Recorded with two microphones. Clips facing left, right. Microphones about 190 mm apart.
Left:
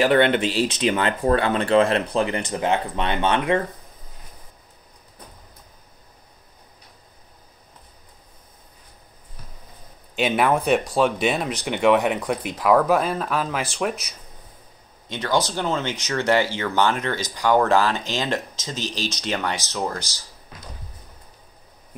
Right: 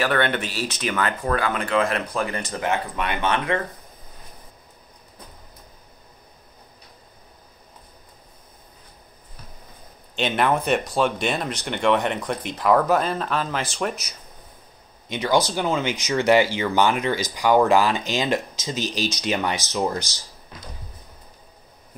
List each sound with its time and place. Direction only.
0.0 s speech: 20° left (ahead or behind)
2.2 s speech: 15° left (ahead or behind)
10.1 s speech: 5° left (ahead or behind)
15.0 s speech: 15° right (ahead or behind)